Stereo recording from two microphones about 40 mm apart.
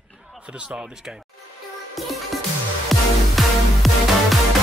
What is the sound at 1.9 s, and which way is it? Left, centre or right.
Music, centre.